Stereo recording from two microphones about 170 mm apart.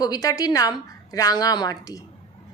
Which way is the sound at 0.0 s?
20° left (ahead or behind).